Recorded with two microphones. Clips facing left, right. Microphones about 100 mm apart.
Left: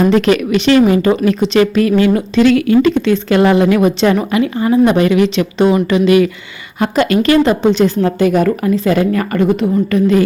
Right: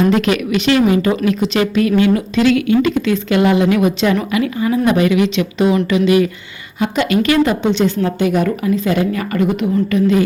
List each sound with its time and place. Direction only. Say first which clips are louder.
0.1 s a woman's voice: left 3 dB; 35° left (ahead or behind)